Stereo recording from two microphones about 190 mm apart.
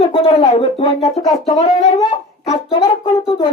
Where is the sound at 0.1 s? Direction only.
25° left (ahead or behind).